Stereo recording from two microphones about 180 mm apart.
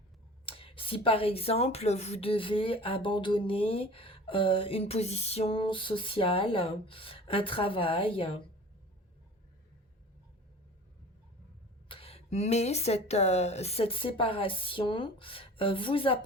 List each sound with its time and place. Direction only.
0.4 s speech: 30° left (ahead or behind)
11.9 s speech: 30° left (ahead or behind)